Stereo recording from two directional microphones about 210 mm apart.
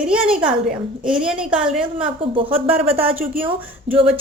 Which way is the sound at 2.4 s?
25° right (ahead or behind).